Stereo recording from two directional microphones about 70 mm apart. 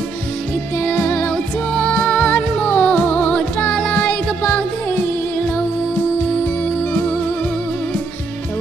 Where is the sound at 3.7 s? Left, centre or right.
Centre.